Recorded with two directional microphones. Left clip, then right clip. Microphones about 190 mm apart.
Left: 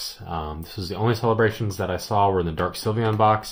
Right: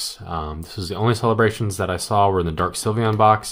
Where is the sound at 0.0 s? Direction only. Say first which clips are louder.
Right 3 dB; 25° right (ahead or behind).